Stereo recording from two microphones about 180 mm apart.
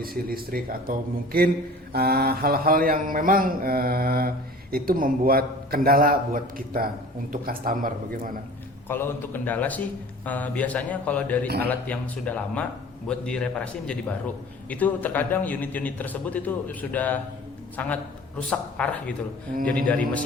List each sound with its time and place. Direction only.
0.0 s mantra: 55° right (ahead or behind)
4.7 s a man's voice: 55° right (ahead or behind)
8.9 s a man's voice: 15° left (ahead or behind)